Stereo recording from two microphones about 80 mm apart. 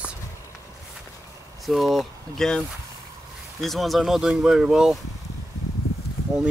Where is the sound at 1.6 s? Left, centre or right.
Centre.